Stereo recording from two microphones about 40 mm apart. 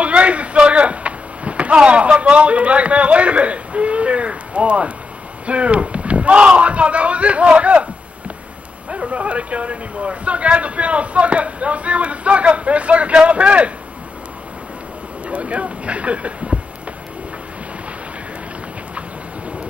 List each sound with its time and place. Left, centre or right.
0.0 s a sound: right
5.5 s speech: right
8.9 s speech: right
15.2 s speech: right